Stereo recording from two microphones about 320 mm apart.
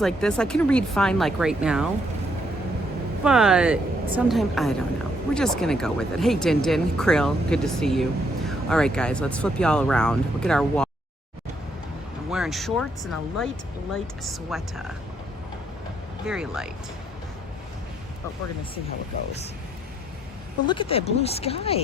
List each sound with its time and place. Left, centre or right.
0.0 s speech: centre
3.2 s speech: centre
12.3 s speech: centre
16.2 s speech: centre
20.7 s speech: centre